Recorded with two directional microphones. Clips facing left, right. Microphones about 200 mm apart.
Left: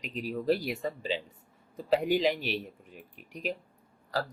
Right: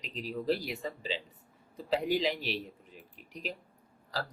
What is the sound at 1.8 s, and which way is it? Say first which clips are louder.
Speech: left 4 dB; 50° left (ahead or behind).